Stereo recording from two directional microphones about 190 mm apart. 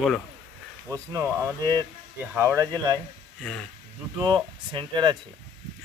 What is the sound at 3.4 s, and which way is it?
Speech, 5° left (ahead or behind).